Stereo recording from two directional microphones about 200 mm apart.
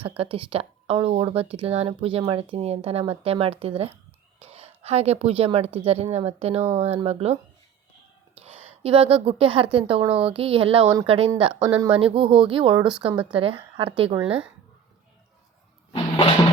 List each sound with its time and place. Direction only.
0.2 s a woman's voice: 30° right (ahead or behind)
8.8 s speech: 30° right (ahead or behind)
15.9 s music: 25° left (ahead or behind)